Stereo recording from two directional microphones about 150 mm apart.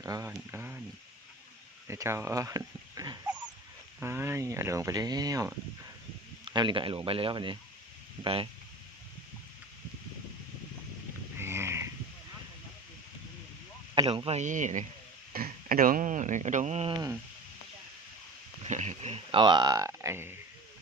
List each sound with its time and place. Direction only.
0.0 s a sound: 20° right (ahead or behind)
1.9 s speech: 20° right (ahead or behind); by 8.4 s 40° right (ahead or behind)
11.3 s a sound: 15° right (ahead or behind)
13.9 s a sound: 30° right (ahead or behind)
14.3 s speech: 50° right (ahead or behind)
15.3 s speech: 75° right (ahead or behind); by 16.9 s 50° right (ahead or behind)
16.9 s speech: 25° right (ahead or behind)
18.6 s speech: 50° right (ahead or behind)
19.4 s speech: 30° right (ahead or behind)